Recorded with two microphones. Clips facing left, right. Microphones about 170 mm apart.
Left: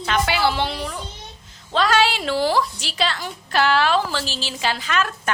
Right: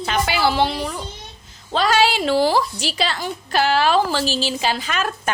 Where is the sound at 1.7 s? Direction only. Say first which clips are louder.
Right 1 dB; 40° right (ahead or behind).